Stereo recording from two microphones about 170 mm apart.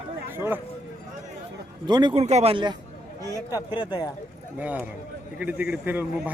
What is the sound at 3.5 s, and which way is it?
Speech, 25° left (ahead or behind).